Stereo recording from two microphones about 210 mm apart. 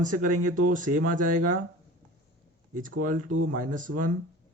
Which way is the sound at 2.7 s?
40° right (ahead or behind).